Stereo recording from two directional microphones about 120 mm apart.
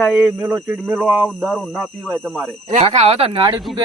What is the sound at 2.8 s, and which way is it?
Speech, 65° right (ahead or behind).